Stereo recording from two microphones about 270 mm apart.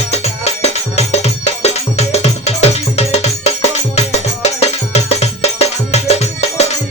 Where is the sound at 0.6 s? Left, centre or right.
Left.